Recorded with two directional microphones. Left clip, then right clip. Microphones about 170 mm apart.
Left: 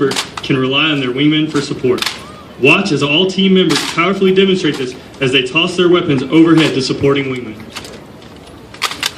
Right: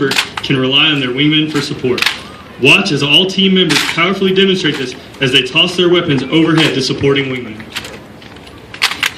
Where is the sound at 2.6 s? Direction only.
35° right (ahead or behind).